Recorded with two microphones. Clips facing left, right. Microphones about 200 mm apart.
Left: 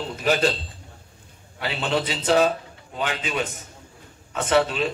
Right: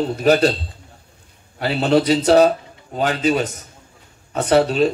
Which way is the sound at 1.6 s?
40° right (ahead or behind).